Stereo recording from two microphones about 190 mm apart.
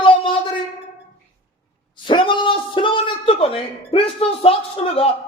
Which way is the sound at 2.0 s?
25° left (ahead or behind).